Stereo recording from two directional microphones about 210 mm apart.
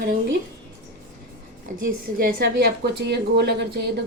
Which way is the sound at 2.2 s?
45° right (ahead or behind).